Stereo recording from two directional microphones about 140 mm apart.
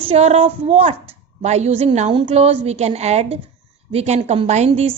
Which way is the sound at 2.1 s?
40° right (ahead or behind).